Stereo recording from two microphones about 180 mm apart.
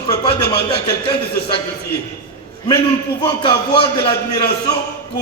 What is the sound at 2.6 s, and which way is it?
A man's voice, 25° left (ahead or behind).